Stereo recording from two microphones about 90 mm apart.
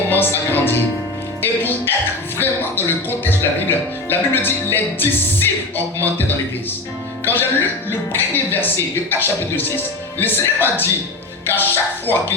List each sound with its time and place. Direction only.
0.1 s speech: 25° left (ahead or behind)